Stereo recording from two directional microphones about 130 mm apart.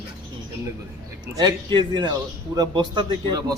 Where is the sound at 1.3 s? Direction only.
35° right (ahead or behind).